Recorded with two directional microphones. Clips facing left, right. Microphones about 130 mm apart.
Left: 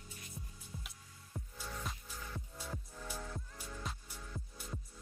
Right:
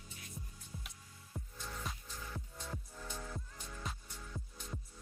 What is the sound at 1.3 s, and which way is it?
Music, centre (ahead or behind).